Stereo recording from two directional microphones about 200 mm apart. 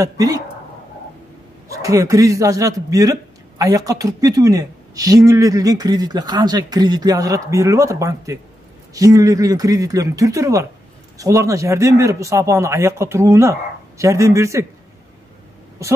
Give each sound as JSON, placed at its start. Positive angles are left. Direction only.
{"t": 0.0, "sound": "a man's voice", "side_deg": -15}
{"t": 1.7, "sound": "a man's voice", "side_deg": -15}
{"t": 15.8, "sound": "a man's voice", "side_deg": -15}